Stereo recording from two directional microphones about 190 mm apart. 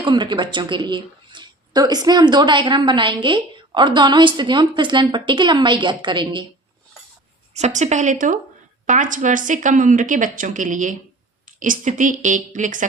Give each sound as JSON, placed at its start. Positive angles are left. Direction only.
{"t": 0.0, "sound": "speech", "side_deg": -25}
{"t": 7.5, "sound": "a woman's voice", "side_deg": -35}